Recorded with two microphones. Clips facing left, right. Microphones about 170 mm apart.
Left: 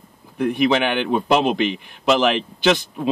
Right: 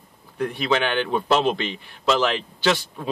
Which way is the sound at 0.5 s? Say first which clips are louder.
Left 5 dB; 15° left (ahead or behind).